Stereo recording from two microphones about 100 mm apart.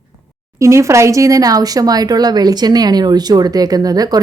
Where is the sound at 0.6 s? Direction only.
30° right (ahead or behind).